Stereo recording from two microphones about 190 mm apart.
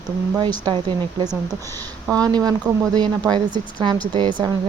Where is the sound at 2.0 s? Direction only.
20° right (ahead or behind).